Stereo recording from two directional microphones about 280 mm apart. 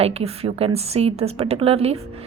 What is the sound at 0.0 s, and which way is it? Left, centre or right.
A woman's voice, right.